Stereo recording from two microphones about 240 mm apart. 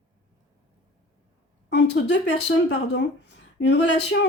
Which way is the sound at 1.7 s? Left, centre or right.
Left.